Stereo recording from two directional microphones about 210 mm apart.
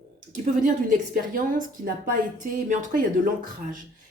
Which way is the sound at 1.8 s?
40° right (ahead or behind).